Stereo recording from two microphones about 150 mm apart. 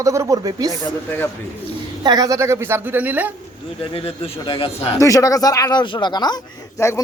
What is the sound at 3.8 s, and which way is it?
Speech, 40° left (ahead or behind).